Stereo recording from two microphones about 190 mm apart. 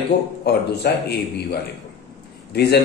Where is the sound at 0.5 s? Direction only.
60° left (ahead or behind).